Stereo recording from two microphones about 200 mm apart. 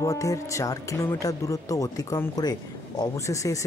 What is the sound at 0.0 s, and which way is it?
Speech, 15° left (ahead or behind).